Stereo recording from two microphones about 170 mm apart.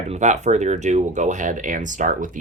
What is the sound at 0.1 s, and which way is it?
Speech, 45° right (ahead or behind).